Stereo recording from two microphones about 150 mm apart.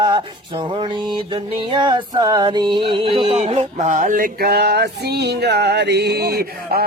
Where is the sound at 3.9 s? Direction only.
65° right (ahead or behind).